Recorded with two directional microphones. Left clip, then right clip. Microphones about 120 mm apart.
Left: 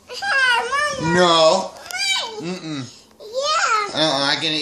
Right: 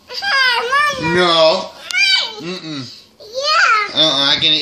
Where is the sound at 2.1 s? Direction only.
30° left (ahead or behind).